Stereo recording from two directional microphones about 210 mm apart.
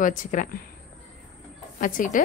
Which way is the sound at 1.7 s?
40° left (ahead or behind).